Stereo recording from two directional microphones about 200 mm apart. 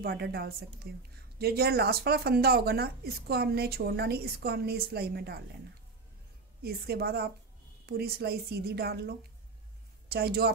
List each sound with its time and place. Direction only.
0.0 s speech: 50° right (ahead or behind)
6.6 s speech: 50° right (ahead or behind)